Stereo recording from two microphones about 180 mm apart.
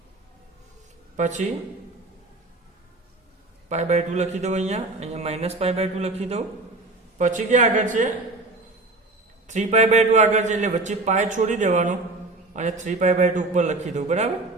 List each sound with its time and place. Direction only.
1.1 s a man's voice: 40° right (ahead or behind)
3.7 s a man's voice: 40° right (ahead or behind)
9.5 s a man's voice: 40° right (ahead or behind)